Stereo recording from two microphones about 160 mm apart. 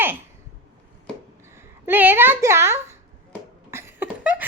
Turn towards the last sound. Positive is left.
turn(degrees=-10)  # may be behind; listen again after turning